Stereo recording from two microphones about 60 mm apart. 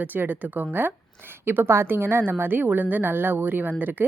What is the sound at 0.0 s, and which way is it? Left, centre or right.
A woman's voice, right.